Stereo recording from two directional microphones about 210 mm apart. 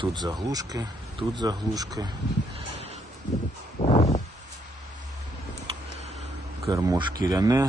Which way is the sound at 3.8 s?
30° left (ahead or behind).